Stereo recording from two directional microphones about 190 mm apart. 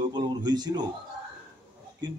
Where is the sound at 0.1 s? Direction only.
20° right (ahead or behind).